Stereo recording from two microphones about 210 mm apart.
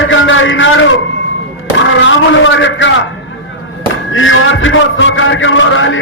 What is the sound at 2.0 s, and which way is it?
A man's voice, 60° left (ahead or behind).